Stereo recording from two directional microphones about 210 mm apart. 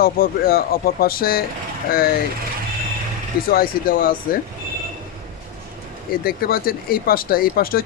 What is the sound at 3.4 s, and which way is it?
Speech, 45° left (ahead or behind).